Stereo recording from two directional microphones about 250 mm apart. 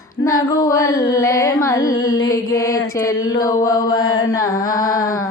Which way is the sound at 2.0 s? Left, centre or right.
Left.